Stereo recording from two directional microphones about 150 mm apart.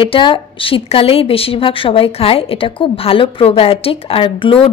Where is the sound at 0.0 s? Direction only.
35° left (ahead or behind).